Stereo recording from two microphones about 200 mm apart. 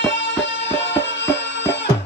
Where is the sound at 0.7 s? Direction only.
60° left (ahead or behind).